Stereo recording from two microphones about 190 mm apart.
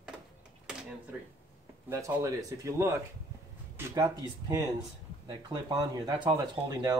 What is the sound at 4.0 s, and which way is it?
Speech, 20° right (ahead or behind).